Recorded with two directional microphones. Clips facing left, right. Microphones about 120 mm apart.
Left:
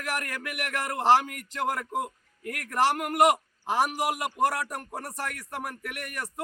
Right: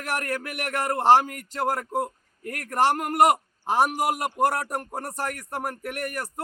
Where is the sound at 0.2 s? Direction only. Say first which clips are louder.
Right 4 dB; 40° right (ahead or behind).